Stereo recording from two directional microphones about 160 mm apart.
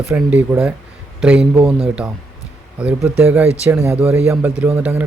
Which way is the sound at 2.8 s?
10° right (ahead or behind).